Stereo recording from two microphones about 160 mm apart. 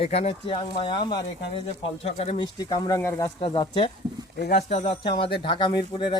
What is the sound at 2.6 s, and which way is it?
Speech, 25° left (ahead or behind).